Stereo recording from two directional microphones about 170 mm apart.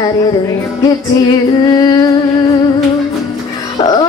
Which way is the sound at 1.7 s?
25° left (ahead or behind).